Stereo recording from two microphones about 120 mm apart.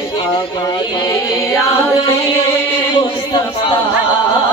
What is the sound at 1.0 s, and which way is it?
Music, 25° left (ahead or behind).